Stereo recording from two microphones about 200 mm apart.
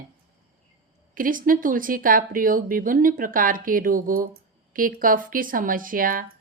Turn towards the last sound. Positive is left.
turn(degrees=-45)  # may be behind; listen again after turning